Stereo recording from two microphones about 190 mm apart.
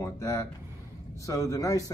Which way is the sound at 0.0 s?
15° left (ahead or behind).